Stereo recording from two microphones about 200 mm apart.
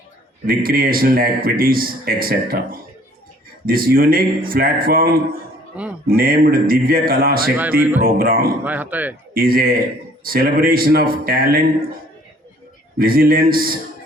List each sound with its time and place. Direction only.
0.4 s a man's voice: 50° right (ahead or behind)
7.5 s speech: 10° right (ahead or behind)
8.0 s a man's voice: 45° right (ahead or behind)
8.6 s speech: 10° right (ahead or behind)
9.3 s a man's voice: 45° right (ahead or behind)
13.0 s a man's voice: 45° right (ahead or behind)